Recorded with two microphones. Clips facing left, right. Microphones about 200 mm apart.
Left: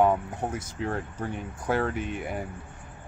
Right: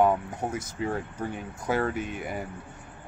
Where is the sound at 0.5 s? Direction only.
Centre (ahead or behind).